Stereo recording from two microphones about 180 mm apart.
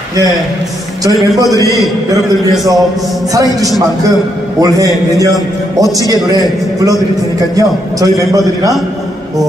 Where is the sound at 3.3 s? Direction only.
20° right (ahead or behind).